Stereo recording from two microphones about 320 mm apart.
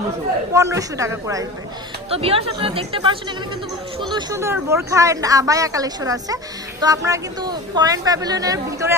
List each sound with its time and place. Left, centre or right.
0.5 s speech: centre